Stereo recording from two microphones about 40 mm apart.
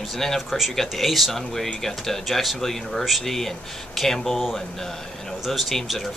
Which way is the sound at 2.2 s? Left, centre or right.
Centre.